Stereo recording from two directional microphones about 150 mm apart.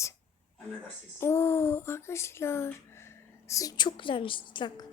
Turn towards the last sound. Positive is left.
turn(degrees=30)  # may be behind; listen again after turning